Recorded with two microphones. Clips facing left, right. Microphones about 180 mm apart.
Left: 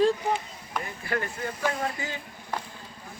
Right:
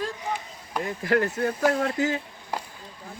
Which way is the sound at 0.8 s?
80° right.